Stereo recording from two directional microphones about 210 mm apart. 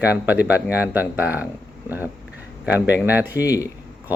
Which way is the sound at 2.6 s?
10° right (ahead or behind).